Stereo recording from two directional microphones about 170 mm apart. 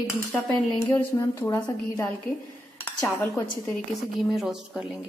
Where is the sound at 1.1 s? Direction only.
20° left (ahead or behind).